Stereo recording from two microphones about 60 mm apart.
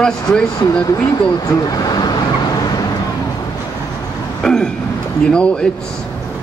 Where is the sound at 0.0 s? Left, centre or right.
Centre.